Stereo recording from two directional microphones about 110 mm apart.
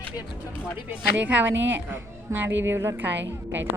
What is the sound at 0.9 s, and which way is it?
A woman's voice, 15° right (ahead or behind).